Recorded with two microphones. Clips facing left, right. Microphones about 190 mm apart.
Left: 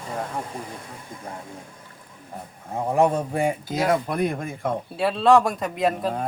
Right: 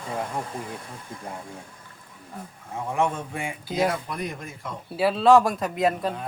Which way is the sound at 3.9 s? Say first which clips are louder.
Left 8 dB; 55° left (ahead or behind).